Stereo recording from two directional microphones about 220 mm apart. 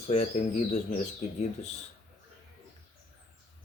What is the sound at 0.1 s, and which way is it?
Speech, 30° left (ahead or behind).